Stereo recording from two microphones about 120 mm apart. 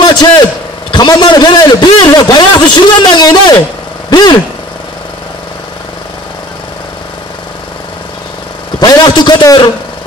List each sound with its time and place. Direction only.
0.0 s a man's voice: 40° left (ahead or behind)
8.7 s a man's voice: 35° left (ahead or behind)